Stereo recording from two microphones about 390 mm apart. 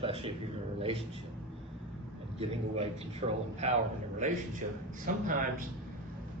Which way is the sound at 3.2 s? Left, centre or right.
Centre.